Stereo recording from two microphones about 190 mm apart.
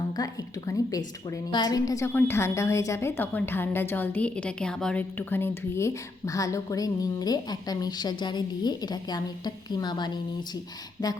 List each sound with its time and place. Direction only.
0.7 s a woman's voice: 15° left (ahead or behind)